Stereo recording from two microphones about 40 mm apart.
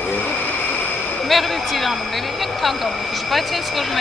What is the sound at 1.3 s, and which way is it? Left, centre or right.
Speech, centre.